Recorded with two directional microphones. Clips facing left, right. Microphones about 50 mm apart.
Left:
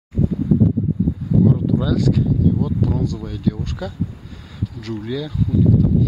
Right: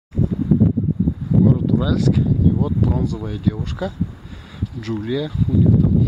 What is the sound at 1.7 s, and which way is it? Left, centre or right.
Speech, centre.